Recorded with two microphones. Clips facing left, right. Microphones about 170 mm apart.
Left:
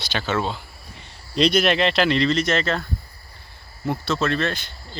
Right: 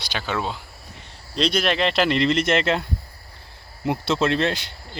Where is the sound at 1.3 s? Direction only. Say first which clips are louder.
Left 3 dB; 5° left (ahead or behind).